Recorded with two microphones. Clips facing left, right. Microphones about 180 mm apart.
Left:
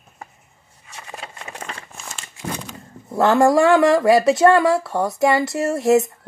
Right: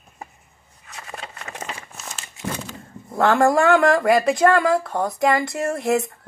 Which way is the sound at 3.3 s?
20° left (ahead or behind).